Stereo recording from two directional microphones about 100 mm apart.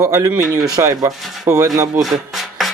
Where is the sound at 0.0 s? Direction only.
35° right (ahead or behind).